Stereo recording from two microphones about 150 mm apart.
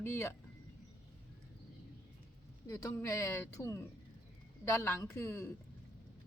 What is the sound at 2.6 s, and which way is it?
A woman's voice, 20° left (ahead or behind).